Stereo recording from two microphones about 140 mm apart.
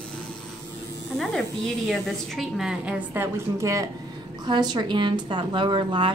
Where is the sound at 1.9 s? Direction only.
Centre (ahead or behind).